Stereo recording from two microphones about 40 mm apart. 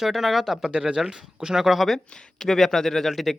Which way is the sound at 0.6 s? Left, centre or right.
Right.